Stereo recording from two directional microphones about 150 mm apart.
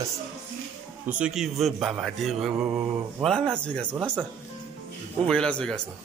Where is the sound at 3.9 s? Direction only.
10° right (ahead or behind).